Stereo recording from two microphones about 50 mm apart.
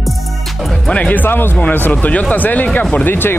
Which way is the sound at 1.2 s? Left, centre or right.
Left.